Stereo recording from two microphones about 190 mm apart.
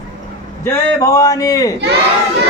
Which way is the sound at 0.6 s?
20° left (ahead or behind).